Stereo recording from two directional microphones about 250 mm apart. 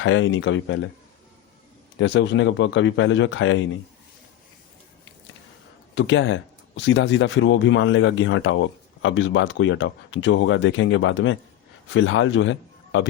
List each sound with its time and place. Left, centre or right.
0.0 s speech: left
2.0 s speech: left
5.9 s a man's voice: left